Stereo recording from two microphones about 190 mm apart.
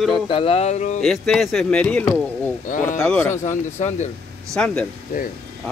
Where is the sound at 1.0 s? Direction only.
Centre (ahead or behind).